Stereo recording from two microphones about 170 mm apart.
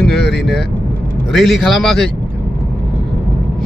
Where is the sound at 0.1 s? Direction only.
75° left (ahead or behind).